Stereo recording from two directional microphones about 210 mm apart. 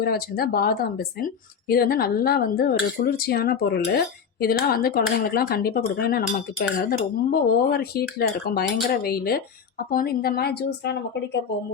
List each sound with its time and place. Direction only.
0.0 s speech: 45° left (ahead or behind)